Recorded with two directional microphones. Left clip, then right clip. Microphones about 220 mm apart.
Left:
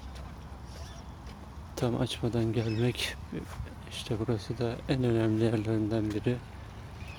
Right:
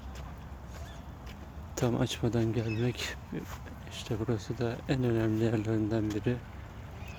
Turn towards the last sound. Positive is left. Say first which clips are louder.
# left 1 dB
turn(degrees=5)  # may be behind; listen again after turning